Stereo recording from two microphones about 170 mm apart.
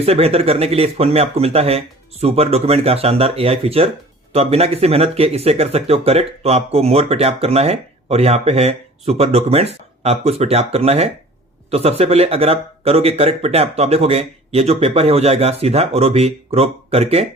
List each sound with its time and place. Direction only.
0.0 s speech: 35° right (ahead or behind)